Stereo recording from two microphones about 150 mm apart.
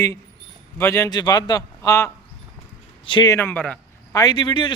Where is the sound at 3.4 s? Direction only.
10° left (ahead or behind).